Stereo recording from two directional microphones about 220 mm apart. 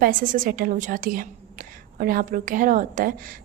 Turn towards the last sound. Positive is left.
turn(degrees=-40)  # may be behind; listen again after turning